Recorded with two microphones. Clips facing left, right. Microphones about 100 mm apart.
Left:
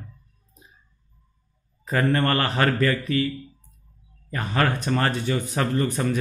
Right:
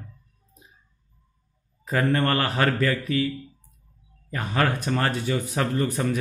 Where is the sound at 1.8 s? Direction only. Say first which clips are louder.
Left 1 dB; 10° right (ahead or behind).